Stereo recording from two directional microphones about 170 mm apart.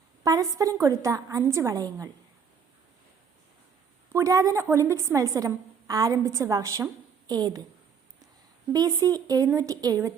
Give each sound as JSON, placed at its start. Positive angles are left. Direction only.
{"t": 0.2, "sound": "a woman's voice", "side_deg": -20}
{"t": 4.1, "sound": "a woman's voice", "side_deg": -20}
{"t": 8.7, "sound": "a woman's voice", "side_deg": -20}